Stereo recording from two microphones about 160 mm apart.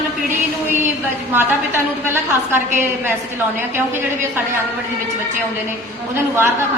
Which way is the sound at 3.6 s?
15° right (ahead or behind).